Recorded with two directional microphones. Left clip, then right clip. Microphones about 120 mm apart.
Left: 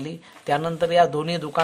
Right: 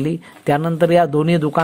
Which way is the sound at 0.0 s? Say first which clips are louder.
Right 10 dB; 45° right (ahead or behind).